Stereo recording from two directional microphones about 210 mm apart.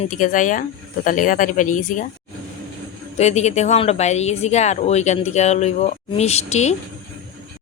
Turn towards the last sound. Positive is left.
turn(degrees=30)  # may be behind; listen again after turning